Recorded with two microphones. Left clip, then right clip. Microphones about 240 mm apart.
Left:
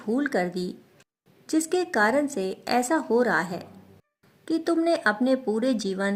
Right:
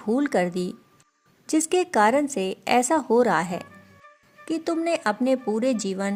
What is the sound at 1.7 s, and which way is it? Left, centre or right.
A woman's voice, right.